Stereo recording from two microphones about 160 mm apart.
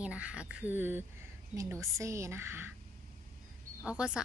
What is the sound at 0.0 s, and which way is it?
Speech, 5° right (ahead or behind).